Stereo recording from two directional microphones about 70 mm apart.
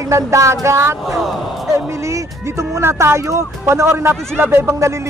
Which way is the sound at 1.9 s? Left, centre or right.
Right.